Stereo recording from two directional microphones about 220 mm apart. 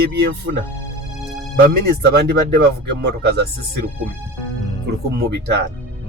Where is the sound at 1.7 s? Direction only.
50° right (ahead or behind).